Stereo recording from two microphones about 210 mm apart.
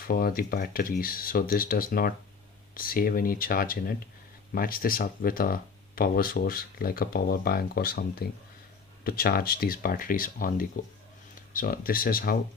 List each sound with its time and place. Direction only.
0.1 s speech: 45° left (ahead or behind)